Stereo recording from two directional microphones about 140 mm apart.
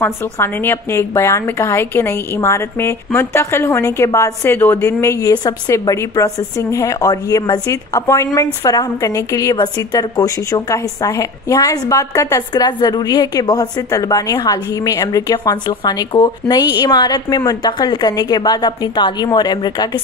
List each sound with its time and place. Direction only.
0.0 s a woman's voice: 15° left (ahead or behind); by 20.0 s 30° left (ahead or behind)